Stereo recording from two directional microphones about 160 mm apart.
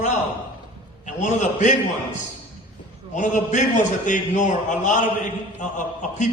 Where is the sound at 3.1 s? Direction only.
50° left (ahead or behind).